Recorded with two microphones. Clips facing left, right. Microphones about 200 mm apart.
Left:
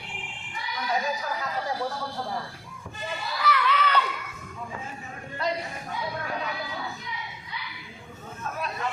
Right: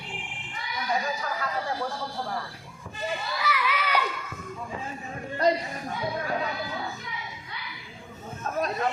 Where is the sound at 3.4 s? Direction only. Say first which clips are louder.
Left 5 dB; 5° right (ahead or behind).